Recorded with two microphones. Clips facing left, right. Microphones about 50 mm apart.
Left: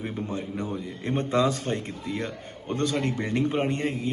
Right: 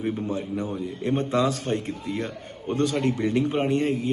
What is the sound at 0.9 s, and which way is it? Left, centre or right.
Speech, left.